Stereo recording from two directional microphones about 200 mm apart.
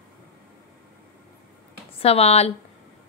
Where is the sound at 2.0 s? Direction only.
30° left (ahead or behind).